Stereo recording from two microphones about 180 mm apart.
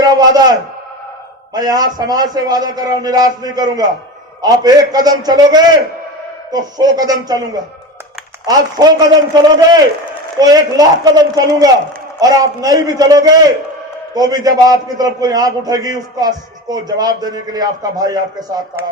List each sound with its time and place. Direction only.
0.0 s a man's voice: 20° right (ahead or behind)
1.5 s a man's voice: 20° right (ahead or behind)
8.4 s a man's voice: 20° right (ahead or behind)